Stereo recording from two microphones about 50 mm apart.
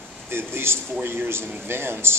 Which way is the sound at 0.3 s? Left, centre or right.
Right.